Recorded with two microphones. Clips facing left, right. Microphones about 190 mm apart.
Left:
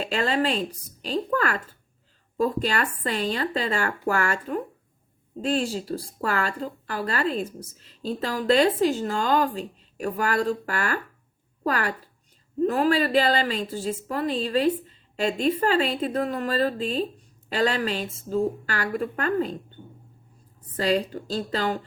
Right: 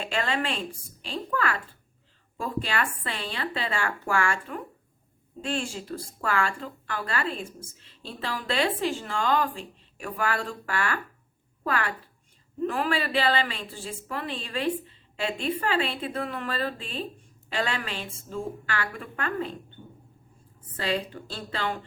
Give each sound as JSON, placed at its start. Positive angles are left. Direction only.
{"t": 0.0, "sound": "speech", "side_deg": 35}
{"t": 20.7, "sound": "speech", "side_deg": 40}